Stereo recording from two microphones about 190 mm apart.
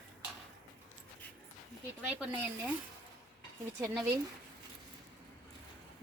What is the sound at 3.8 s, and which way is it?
Speech, 10° right (ahead or behind).